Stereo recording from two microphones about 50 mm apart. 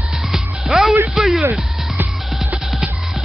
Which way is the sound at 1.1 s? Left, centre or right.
Centre.